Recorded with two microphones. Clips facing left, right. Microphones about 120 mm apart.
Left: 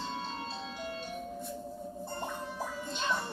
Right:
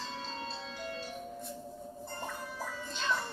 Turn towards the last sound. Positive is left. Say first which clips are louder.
# left 2 dB
turn(degrees=20)  # may be behind; listen again after turning